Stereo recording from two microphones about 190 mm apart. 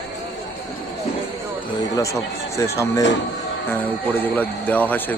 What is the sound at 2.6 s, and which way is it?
Speech, 15° left (ahead or behind).